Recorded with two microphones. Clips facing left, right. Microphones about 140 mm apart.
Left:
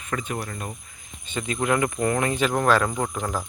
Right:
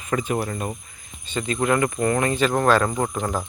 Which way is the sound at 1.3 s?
10° left (ahead or behind).